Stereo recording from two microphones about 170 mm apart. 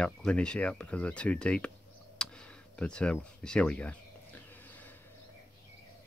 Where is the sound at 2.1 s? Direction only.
5° left (ahead or behind).